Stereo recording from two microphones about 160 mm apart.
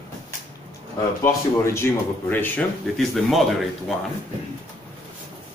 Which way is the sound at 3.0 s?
Centre (ahead or behind).